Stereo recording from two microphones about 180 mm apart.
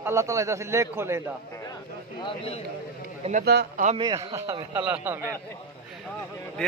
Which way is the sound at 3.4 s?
65° right (ahead or behind).